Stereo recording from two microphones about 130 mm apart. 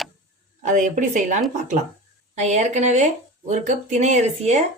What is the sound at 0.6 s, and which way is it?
A woman's voice, 70° right (ahead or behind).